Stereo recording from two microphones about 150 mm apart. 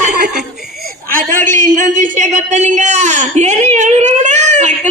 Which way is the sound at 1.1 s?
60° right (ahead or behind).